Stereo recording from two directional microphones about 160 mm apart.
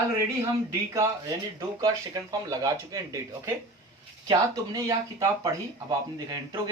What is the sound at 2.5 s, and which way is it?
Speech, 20° right (ahead or behind).